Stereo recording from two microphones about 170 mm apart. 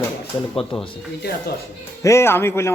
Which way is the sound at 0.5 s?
30° left (ahead or behind).